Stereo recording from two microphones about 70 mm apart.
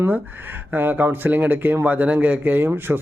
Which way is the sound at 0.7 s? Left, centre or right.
Right.